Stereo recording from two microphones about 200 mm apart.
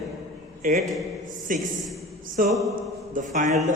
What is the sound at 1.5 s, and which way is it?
A man's voice, 45° right (ahead or behind).